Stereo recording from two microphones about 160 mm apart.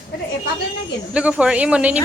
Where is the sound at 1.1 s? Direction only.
5° right (ahead or behind).